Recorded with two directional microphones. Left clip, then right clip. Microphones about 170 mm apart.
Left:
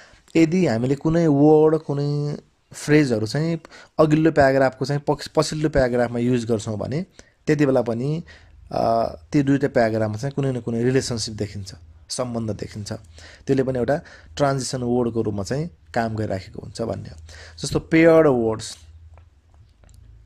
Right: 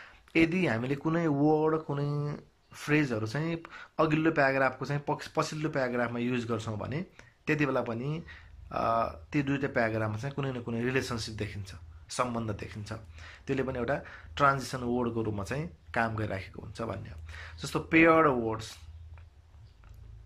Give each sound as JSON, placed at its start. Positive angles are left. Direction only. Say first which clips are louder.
{"t": 0.0, "sound": "speech", "louder": "left 8 dB", "side_deg": 40}